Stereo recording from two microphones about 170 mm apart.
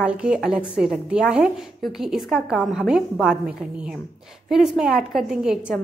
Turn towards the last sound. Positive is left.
turn(degrees=-5)  # may be behind; listen again after turning